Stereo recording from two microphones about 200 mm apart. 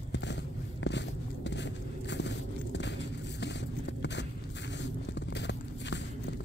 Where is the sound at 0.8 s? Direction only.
60° left (ahead or behind).